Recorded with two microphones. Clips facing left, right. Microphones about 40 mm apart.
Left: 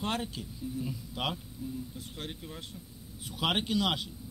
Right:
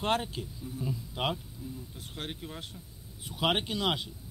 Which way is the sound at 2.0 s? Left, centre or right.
Right.